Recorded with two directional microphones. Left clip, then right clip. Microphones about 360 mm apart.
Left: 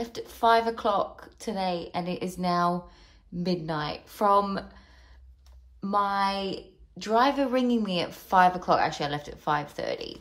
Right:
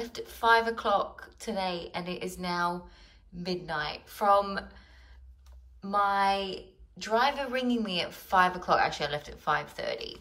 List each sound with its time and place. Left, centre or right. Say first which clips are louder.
0.1 s a woman's voice: left 2 dB; centre
5.9 s a woman's voice: even; centre